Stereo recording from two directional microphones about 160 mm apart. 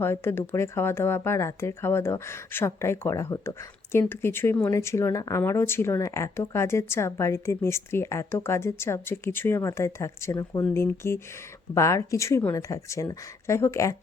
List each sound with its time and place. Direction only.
0.0 s speech: 15° left (ahead or behind)